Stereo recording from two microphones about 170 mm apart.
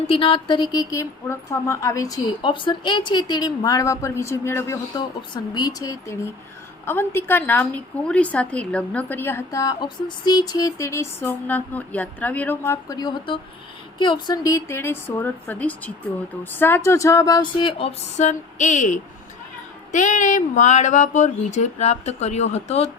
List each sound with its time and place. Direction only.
0.1 s a woman's voice: 30° left (ahead or behind)